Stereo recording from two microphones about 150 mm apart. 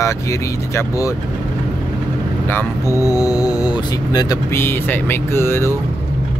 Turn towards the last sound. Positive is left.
turn(degrees=15)  # may be behind; listen again after turning